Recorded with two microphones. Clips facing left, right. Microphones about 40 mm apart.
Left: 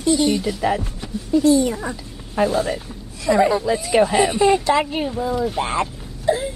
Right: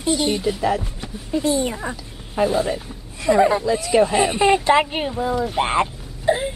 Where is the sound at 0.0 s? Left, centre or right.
Centre.